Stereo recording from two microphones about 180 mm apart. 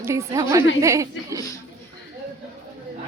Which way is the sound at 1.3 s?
20° left (ahead or behind).